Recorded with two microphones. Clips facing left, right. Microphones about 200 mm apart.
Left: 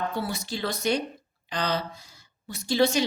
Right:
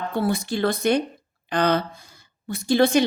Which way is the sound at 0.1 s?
55° right (ahead or behind).